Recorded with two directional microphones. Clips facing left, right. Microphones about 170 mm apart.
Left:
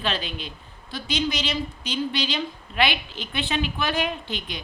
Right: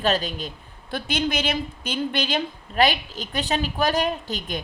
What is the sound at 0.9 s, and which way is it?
A woman's voice, 55° right (ahead or behind).